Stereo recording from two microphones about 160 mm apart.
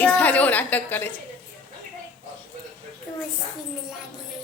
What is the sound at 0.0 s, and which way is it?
A woman's voice, 10° left (ahead or behind).